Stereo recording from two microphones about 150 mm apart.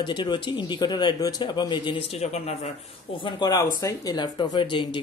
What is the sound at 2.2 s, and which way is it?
Speech, 45° left (ahead or behind).